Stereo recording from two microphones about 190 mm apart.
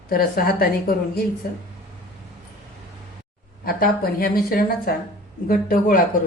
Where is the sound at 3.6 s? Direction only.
50° left (ahead or behind).